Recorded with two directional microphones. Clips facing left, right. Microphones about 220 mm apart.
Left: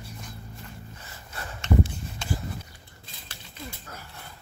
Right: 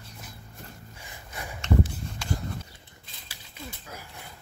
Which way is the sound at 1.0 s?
15° right (ahead or behind).